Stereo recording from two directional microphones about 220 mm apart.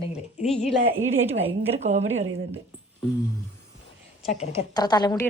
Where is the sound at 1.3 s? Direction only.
30° right (ahead or behind).